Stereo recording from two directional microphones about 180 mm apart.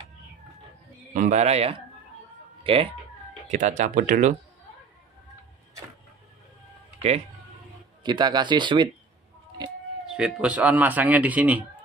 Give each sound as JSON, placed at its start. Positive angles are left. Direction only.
{"t": 1.1, "sound": "a man's voice", "side_deg": -40}
{"t": 3.4, "sound": "speech", "side_deg": -45}
{"t": 8.0, "sound": "speech", "side_deg": -25}
{"t": 10.0, "sound": "speech", "side_deg": -5}